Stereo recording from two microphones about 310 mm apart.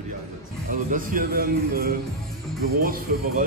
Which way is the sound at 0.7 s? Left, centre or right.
Right.